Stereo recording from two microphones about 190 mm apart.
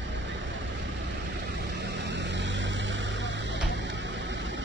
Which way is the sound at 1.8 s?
65° right (ahead or behind).